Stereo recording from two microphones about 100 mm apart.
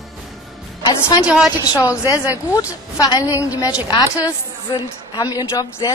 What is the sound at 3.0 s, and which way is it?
Speech, 35° left (ahead or behind).